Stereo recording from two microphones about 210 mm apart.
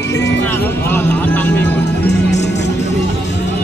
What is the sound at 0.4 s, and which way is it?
Music, 10° left (ahead or behind).